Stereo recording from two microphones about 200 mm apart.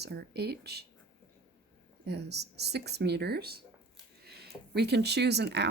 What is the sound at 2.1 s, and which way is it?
Speech, 55° right (ahead or behind).